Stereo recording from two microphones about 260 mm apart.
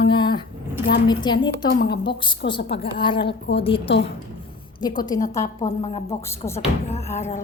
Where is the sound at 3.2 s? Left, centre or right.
Left.